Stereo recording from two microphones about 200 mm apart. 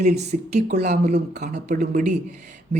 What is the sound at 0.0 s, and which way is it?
Speech, 35° right (ahead or behind).